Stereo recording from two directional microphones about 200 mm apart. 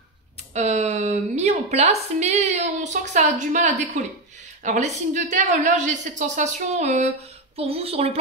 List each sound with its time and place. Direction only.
0.6 s a woman's voice: 35° right (ahead or behind)